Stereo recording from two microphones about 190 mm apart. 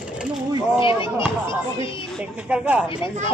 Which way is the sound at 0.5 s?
25° left (ahead or behind).